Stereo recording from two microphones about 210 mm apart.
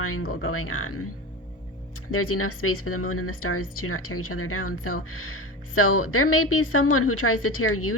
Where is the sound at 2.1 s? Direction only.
90° left.